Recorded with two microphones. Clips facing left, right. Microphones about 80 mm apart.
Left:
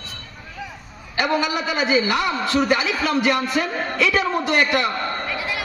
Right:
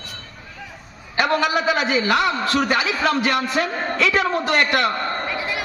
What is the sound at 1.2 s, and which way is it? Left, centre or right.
A man's voice, right.